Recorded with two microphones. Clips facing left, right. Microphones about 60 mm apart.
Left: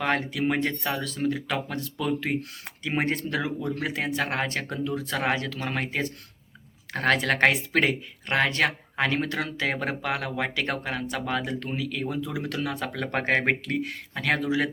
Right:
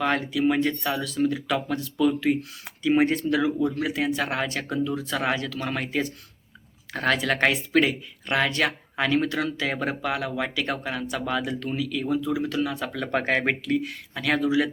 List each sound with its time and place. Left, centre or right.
0.0 s speech: left
12.9 s speech: left